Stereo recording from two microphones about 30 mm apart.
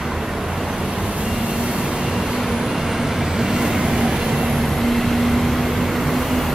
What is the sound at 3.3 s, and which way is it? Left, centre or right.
Vehicle, centre.